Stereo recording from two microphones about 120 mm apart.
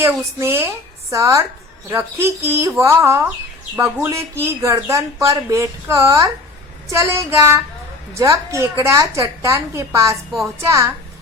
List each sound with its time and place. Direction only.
0.0 s speech: 25° right (ahead or behind)